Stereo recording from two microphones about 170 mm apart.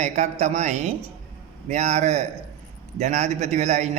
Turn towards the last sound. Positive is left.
turn(degrees=-45)  # may be behind; listen again after turning